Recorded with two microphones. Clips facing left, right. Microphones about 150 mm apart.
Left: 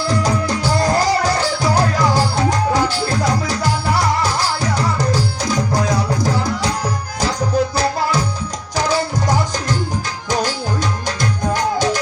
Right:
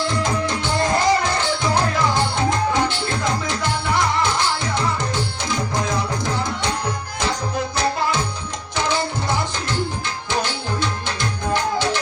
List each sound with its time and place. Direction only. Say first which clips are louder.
0.1 s music: left 4 dB; 35° left (ahead or behind)
8.7 s music: left 4 dB; 40° left (ahead or behind)